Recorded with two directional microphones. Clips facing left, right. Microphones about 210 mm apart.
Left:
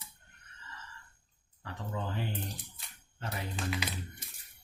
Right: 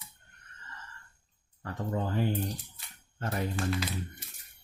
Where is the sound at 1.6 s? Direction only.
45° right (ahead or behind).